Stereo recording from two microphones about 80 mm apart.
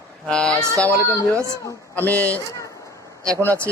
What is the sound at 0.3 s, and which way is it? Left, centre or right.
Speech, centre.